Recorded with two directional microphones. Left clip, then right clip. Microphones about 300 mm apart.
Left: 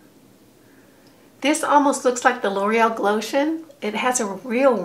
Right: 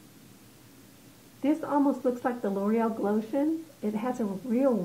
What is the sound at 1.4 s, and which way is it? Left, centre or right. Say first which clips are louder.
A woman's voice: left 10 dB; centre.